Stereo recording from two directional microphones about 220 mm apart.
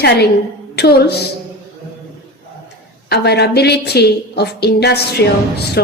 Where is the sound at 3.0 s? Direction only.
50° left (ahead or behind).